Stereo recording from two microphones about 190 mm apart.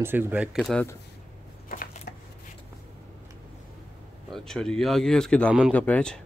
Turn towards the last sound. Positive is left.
turn(degrees=5)  # may be behind; listen again after turning